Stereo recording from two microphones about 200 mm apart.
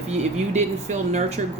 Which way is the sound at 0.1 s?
35° right (ahead or behind).